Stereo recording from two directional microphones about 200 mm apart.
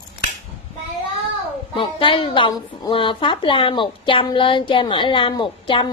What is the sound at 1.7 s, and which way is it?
A woman's voice, 25° left (ahead or behind).